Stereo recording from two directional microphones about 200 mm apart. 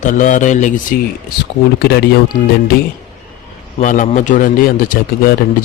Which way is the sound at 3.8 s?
40° left (ahead or behind).